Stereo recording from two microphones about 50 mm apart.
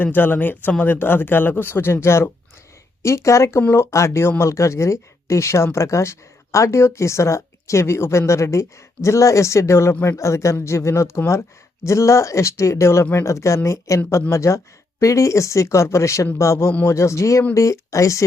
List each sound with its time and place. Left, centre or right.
0.0 s speech: left
3.0 s speech: left
3.7 s speech: left
13.7 s speech: left
14.1 s speech: left